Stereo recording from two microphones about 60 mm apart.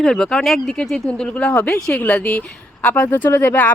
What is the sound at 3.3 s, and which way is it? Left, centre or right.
Speech, left.